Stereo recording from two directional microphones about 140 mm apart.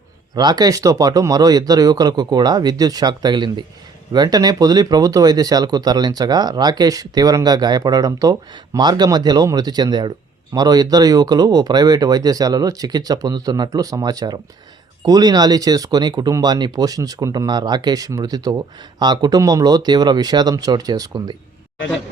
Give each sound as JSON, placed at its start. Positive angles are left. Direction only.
{"t": 0.3, "sound": "speech", "side_deg": -30}